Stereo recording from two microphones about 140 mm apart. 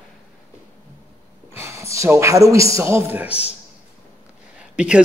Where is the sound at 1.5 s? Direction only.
20° right (ahead or behind).